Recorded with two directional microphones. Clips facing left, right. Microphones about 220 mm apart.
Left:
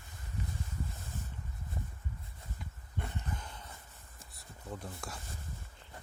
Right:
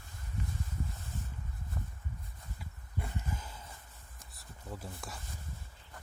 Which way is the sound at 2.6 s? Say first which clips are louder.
Even; 5° right (ahead or behind).